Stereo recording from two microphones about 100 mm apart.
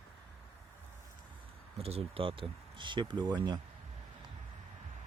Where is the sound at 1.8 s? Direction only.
85° right; by 3.6 s 45° right (ahead or behind).